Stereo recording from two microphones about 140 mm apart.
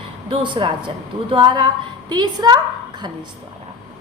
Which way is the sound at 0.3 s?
35° right (ahead or behind).